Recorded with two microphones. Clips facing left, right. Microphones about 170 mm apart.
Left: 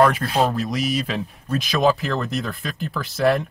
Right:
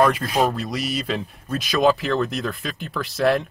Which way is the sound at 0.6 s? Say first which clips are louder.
Left 3 dB; centre (ahead or behind).